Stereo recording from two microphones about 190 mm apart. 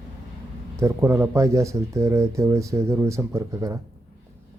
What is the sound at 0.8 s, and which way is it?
Speech, 15° right (ahead or behind).